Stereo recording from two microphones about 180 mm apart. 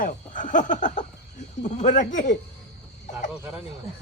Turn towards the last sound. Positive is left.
turn(degrees=-5)  # may be behind; listen again after turning